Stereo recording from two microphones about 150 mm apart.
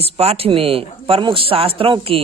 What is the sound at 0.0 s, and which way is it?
A man's voice, 40° right (ahead or behind).